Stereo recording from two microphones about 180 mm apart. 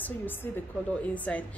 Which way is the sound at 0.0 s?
10° left (ahead or behind).